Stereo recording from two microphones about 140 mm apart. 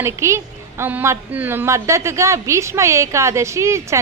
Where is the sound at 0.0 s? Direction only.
20° right (ahead or behind).